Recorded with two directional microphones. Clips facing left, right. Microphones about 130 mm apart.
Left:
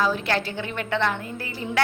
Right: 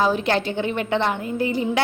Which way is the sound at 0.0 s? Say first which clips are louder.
Right 4 dB; 20° right (ahead or behind).